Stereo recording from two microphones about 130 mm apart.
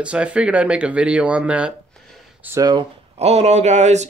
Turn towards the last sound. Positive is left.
turn(degrees=-60)  # may be behind; listen again after turning